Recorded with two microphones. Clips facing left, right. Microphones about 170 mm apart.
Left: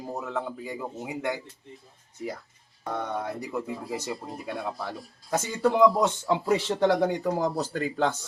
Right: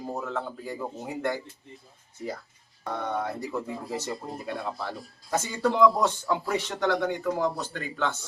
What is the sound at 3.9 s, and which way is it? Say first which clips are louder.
Speech: right 2 dB; 10° left (ahead or behind).